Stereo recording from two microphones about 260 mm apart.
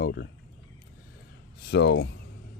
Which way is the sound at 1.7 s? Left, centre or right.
Left.